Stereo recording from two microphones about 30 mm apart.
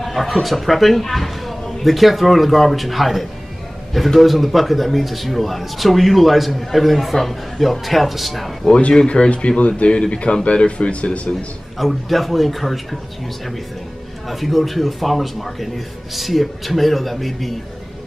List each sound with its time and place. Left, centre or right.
0.0 s speech: centre
8.9 s speech: left
9.6 s speech: left
11.8 s speech: centre
14.2 s speech: centre